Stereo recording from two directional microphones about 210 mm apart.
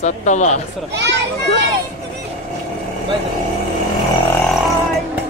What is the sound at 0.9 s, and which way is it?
Speech, 55° right (ahead or behind).